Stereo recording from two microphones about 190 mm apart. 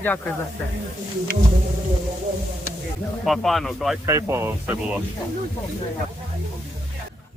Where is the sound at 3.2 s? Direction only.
Centre (ahead or behind).